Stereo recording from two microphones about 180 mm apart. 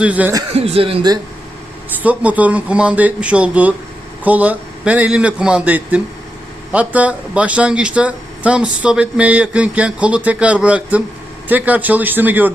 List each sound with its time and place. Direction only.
0.0 s speech: 10° right (ahead or behind)
0.5 s speech: 35° right (ahead or behind)
2.0 s speech: 10° right (ahead or behind)